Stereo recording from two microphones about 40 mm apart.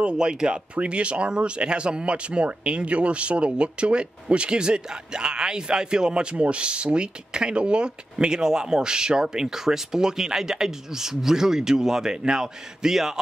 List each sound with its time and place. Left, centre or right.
0.0 s a man's voice: right